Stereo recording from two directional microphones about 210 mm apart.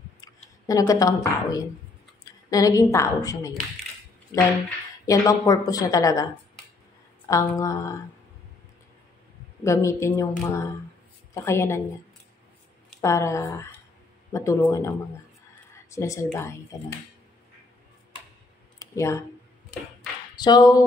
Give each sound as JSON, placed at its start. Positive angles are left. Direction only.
{"t": 0.2, "sound": "a woman's voice", "side_deg": 15}
{"t": 7.2, "sound": "a woman's voice", "side_deg": 15}
{"t": 9.6, "sound": "a woman's voice", "side_deg": 15}
{"t": 13.0, "sound": "a woman's voice", "side_deg": 15}
{"t": 15.7, "sound": "a sound", "side_deg": 15}
{"t": 18.8, "sound": "a sound", "side_deg": 15}
{"t": 20.3, "sound": "speech", "side_deg": 20}